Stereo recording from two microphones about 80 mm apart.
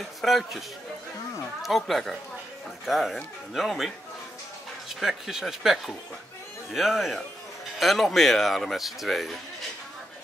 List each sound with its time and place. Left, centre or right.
0.2 s speech: centre